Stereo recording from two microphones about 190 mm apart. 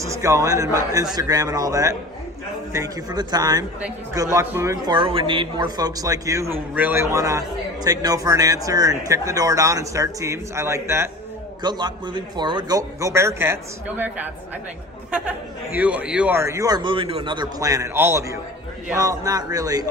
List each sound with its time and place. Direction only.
0.0 s a man's voice: 15° right (ahead or behind)
4.9 s a man's voice: 25° right (ahead or behind); by 14.3 s 10° right (ahead or behind)
15.8 s a man's voice: 5° right (ahead or behind)